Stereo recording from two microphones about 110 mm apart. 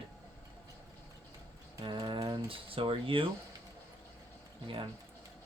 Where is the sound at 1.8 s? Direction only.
45° right (ahead or behind).